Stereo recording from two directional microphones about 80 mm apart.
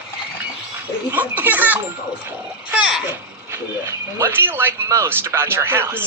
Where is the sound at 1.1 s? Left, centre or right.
Right.